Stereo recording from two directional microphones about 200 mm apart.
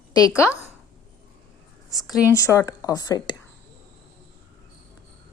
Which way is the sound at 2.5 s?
15° left (ahead or behind).